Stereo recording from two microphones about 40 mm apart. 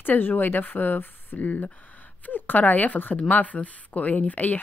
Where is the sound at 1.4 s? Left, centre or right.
Left.